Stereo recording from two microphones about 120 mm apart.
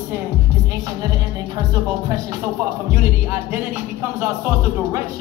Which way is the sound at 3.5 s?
20° right (ahead or behind).